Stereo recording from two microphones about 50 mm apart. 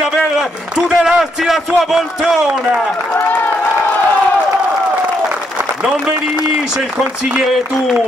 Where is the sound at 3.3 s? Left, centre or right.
Left.